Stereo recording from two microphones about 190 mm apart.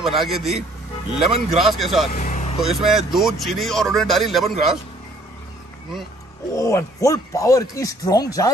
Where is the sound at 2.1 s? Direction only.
40° left (ahead or behind).